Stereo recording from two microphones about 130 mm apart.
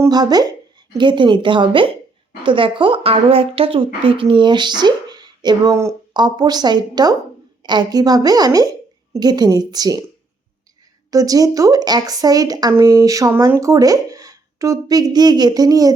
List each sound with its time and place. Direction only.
0.1 s a woman's voice: 30° right (ahead or behind)
11.1 s speech: 25° right (ahead or behind)